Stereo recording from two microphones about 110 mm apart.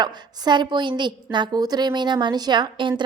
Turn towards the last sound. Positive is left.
turn(degrees=-45)  # may be behind; listen again after turning